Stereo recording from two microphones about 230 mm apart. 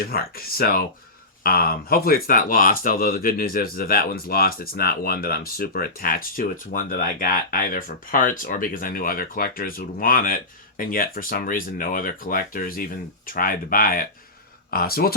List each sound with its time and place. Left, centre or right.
0.0 s speech: left